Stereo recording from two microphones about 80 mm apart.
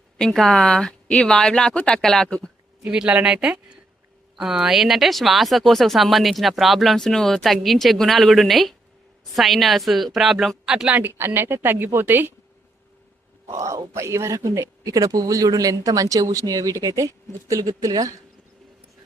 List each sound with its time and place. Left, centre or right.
0.2 s speech: centre
2.8 s speech: centre
11.3 s speech: right
13.5 s speech: right
14.9 s speech: right